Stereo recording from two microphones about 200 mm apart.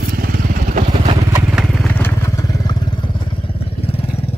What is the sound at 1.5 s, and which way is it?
Vehicle, centre (ahead or behind).